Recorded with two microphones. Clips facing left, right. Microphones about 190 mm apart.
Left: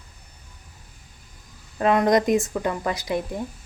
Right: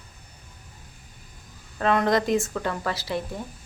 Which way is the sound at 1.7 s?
15° left (ahead or behind).